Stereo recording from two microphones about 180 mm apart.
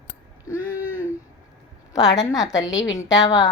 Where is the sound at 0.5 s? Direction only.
10° right (ahead or behind).